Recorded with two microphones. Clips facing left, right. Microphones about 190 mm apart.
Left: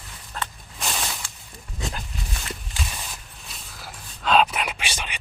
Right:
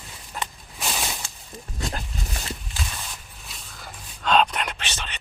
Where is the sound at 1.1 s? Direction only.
20° right (ahead or behind).